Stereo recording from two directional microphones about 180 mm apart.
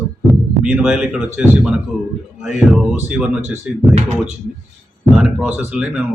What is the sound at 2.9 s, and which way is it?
Speech, 10° right (ahead or behind).